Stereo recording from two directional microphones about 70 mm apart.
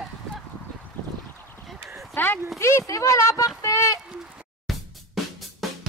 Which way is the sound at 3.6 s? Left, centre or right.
Left.